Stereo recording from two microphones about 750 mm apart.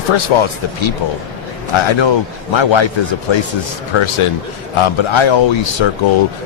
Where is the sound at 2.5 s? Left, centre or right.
Left.